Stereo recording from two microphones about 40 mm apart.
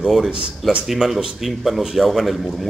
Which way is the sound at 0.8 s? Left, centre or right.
Centre.